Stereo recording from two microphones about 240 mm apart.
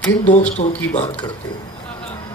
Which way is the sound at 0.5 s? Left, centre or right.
Left.